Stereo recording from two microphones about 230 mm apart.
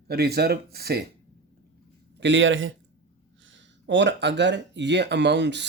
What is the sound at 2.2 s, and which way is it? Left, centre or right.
A man's voice, right.